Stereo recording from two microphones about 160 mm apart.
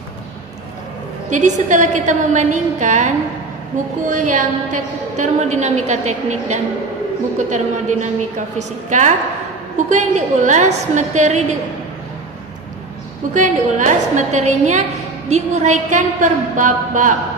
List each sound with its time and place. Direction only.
1.3 s a woman's voice: 50° right (ahead or behind)
4.1 s a woman's voice: 50° right (ahead or behind)
13.3 s a woman's voice: 50° right (ahead or behind)